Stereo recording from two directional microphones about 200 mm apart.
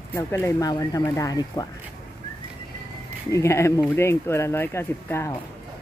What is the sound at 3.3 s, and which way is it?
Speech, 15° left (ahead or behind).